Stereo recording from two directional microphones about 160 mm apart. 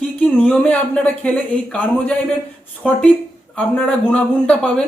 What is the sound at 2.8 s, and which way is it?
Speech, 10° left (ahead or behind).